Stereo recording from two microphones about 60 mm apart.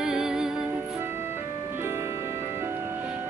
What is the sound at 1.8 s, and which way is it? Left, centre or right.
Music, right.